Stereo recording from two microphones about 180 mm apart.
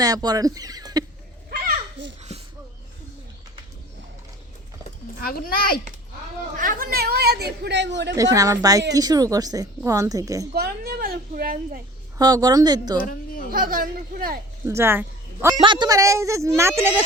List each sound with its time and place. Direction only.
0.0 s a woman's voice: 20° right (ahead or behind)
1.5 s children playing: 55° right (ahead or behind)
5.2 s a child's voice: 50° left (ahead or behind)
6.6 s speech: 50° right (ahead or behind); by 8.1 s 75° right (ahead or behind)
8.1 s a woman's voice: 20° right (ahead or behind)
10.5 s speech: 60° right (ahead or behind)
12.1 s a woman's voice: 20° right (ahead or behind)
13.1 s a sound: 50° left (ahead or behind)
13.5 s speech: 50° right (ahead or behind)
14.7 s speech: 15° right (ahead or behind)
15.5 s speech: 25° right (ahead or behind)